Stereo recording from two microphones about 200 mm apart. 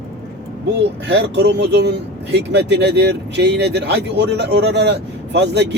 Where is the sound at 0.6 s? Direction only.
60° right (ahead or behind).